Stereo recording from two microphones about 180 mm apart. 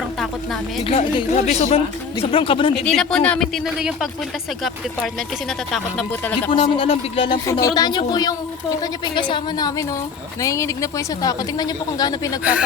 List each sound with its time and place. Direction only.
0.9 s a woman's voice: 30° left (ahead or behind)
2.8 s speech: 5° left (ahead or behind)
5.7 s speech: 5° left (ahead or behind)
6.5 s a woman's voice: 30° left (ahead or behind)